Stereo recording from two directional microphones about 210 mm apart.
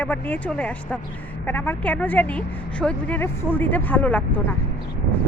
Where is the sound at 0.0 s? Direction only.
10° left (ahead or behind).